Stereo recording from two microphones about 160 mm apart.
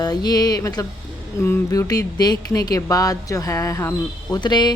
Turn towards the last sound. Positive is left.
turn(degrees=25)  # may be behind; listen again after turning